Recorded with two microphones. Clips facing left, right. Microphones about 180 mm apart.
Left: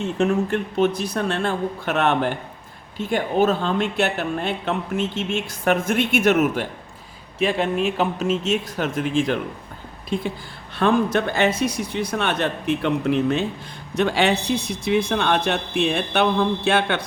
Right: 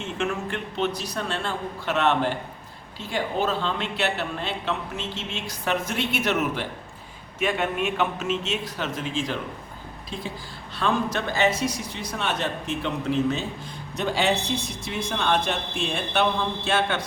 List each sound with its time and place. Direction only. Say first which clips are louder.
0.0 s speech: left 8 dB; 40° left (ahead or behind)
7.3 s speech: left 4 dB; 30° left (ahead or behind); by 9.4 s 55° left (ahead or behind)
10.8 s speech: left 6 dB; 55° left (ahead or behind)